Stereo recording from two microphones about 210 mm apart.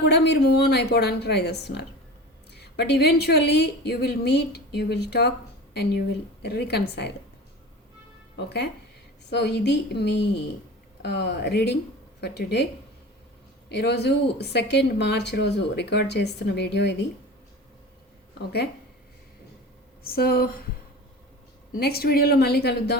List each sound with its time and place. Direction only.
0.0 s a woman's voice: 55° left (ahead or behind)
8.4 s a woman's voice: 50° left (ahead or behind)
13.7 s a woman's voice: 55° left (ahead or behind)
20.1 s a woman's voice: 45° left (ahead or behind)
21.8 s a woman's voice: 50° left (ahead or behind)